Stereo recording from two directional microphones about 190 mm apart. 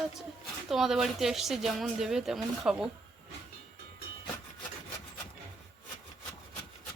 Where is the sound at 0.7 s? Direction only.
Centre (ahead or behind).